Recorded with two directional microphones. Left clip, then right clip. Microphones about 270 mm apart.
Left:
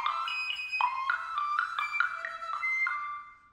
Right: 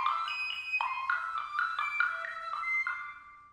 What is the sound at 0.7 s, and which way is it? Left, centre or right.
Music, centre.